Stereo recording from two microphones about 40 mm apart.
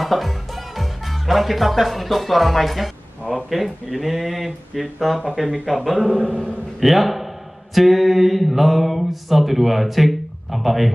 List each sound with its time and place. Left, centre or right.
0.0 s a man's voice: centre